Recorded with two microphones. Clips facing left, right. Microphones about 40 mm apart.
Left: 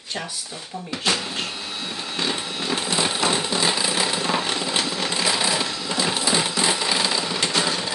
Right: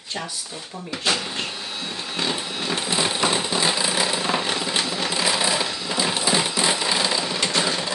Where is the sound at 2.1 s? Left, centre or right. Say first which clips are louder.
Even; centre.